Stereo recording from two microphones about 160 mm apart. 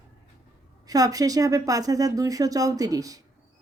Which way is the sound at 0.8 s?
20° right (ahead or behind).